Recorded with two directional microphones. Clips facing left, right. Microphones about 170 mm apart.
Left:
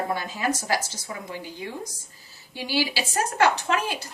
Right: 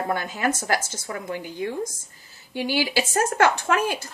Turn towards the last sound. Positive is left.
turn(degrees=-50)  # may be behind; listen again after turning